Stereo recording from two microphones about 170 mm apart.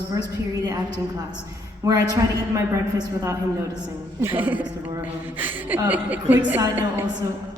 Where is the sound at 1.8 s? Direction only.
20° right (ahead or behind).